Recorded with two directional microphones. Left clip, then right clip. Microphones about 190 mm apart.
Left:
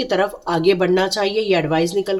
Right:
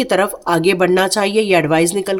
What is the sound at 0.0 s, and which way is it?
A woman's voice, 45° right (ahead or behind).